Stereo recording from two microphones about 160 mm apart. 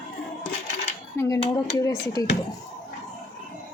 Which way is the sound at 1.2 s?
15° left (ahead or behind).